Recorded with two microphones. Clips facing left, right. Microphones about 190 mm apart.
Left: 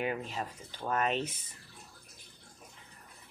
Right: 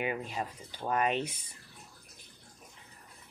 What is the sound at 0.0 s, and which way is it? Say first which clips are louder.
Speech: even; 10° right (ahead or behind).